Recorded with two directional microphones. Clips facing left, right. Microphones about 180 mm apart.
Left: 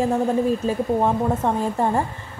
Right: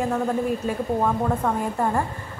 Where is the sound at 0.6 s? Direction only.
25° left (ahead or behind).